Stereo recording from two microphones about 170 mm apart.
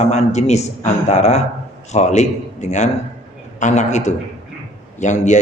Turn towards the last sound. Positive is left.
turn(degrees=45)  # may be behind; listen again after turning